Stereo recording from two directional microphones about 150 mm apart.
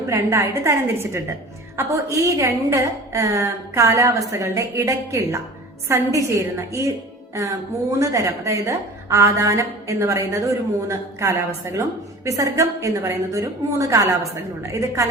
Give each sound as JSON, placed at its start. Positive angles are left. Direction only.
{"t": 0.1, "sound": "a woman's voice", "side_deg": -20}
{"t": 7.9, "sound": "a woman's voice", "side_deg": -20}